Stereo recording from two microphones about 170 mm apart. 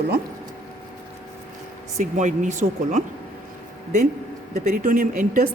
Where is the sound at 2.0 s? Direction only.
45° right (ahead or behind).